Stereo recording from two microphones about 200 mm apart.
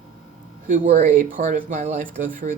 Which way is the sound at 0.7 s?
40° right (ahead or behind).